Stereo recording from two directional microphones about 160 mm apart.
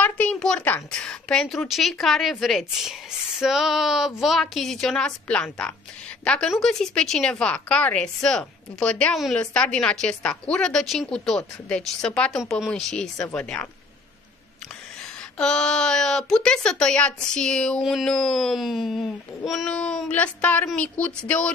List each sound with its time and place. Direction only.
0.0 s a woman's voice: 10° left (ahead or behind)
15.3 s a woman's voice: 5° left (ahead or behind)